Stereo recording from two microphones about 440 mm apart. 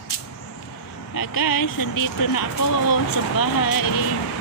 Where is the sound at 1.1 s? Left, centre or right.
Left.